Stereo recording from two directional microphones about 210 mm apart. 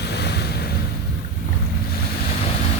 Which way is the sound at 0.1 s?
50° left (ahead or behind).